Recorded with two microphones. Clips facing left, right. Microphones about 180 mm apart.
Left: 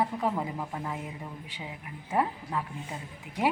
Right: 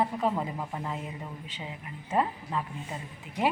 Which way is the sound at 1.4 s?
15° left (ahead or behind).